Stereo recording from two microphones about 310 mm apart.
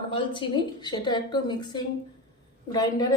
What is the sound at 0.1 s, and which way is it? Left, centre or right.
A woman's voice, centre.